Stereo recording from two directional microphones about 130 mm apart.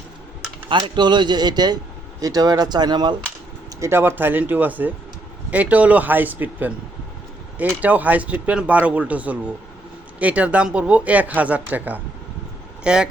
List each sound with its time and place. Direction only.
0.7 s a man's voice: 35° right (ahead or behind)
3.8 s speech: 20° right (ahead or behind)